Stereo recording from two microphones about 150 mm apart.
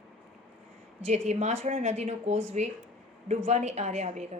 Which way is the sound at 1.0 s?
50° right (ahead or behind).